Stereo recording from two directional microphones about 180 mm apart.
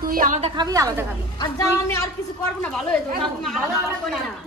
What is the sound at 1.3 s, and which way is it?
Speech, 20° left (ahead or behind).